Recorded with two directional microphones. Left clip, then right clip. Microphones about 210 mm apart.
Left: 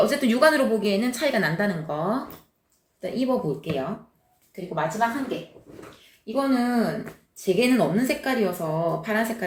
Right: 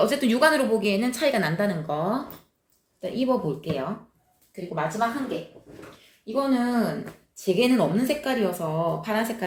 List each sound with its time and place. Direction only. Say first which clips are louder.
0.0 s a woman's voice: left 1 dB; 20° right (ahead or behind)